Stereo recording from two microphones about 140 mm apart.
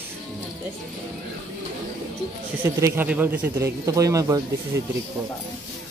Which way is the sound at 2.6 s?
20° right (ahead or behind).